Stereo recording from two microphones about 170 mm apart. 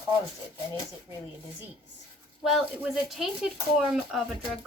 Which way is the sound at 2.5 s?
Centre (ahead or behind).